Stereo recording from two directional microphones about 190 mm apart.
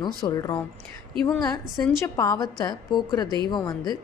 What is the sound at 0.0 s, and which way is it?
Speech, 20° left (ahead or behind).